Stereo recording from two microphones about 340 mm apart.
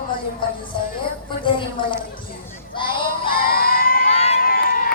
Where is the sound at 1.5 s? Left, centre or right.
Centre.